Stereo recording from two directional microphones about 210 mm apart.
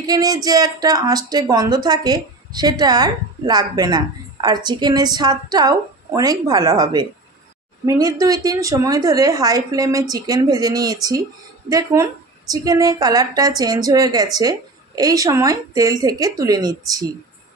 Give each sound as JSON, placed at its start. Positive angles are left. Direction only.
{"t": 0.0, "sound": "a woman's voice", "side_deg": -15}